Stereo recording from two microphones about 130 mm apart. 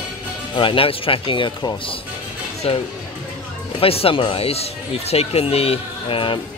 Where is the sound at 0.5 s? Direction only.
45° left (ahead or behind).